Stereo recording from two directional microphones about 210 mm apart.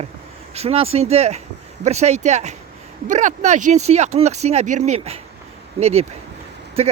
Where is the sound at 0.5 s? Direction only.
30° right (ahead or behind).